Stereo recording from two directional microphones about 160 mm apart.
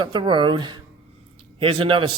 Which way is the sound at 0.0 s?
25° right (ahead or behind).